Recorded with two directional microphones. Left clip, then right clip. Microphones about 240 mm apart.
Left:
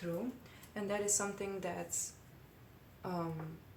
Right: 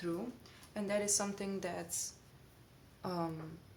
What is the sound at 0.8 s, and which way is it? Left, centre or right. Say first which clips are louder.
A woman's voice: right 1 dB; right.